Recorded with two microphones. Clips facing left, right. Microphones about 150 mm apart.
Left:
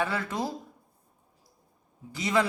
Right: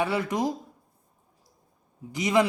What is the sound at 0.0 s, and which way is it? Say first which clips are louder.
Speech: right 4 dB; 15° right (ahead or behind).